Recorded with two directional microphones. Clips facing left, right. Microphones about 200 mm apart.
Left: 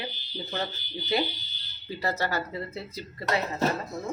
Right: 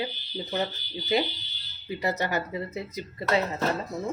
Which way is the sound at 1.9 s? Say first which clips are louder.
Right 1 dB; 20° right (ahead or behind).